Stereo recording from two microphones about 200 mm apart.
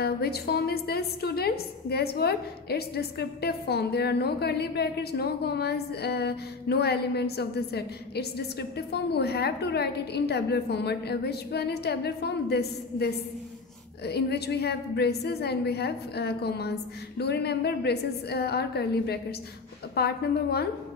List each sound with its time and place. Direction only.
0.0 s a woman's voice: 50° left (ahead or behind)